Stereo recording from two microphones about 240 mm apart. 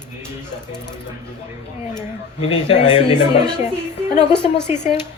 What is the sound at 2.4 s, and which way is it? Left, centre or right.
A man's voice, left.